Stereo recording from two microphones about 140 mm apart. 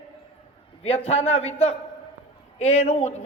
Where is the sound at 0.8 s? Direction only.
50° left (ahead or behind).